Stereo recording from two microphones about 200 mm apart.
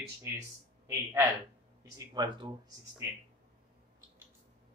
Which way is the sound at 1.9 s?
20° right (ahead or behind).